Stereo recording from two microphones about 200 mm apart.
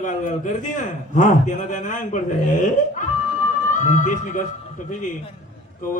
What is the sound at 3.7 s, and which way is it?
Speech, 40° left (ahead or behind).